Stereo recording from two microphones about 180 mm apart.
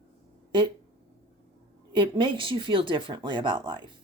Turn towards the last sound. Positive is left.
turn(degrees=-25)  # may be behind; listen again after turning